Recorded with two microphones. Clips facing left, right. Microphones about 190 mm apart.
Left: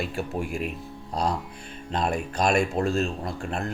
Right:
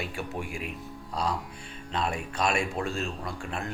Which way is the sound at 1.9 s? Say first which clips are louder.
Left 4 dB; 40° left (ahead or behind).